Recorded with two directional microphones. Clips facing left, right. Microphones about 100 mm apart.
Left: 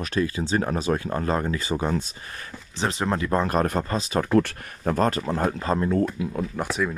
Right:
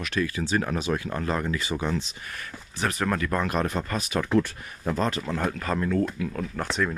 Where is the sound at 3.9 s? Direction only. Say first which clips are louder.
Left 3 dB; 30° left (ahead or behind).